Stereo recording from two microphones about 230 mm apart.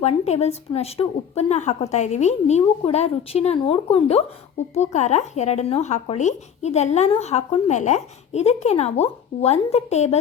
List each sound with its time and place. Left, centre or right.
0.0 s a woman's voice: left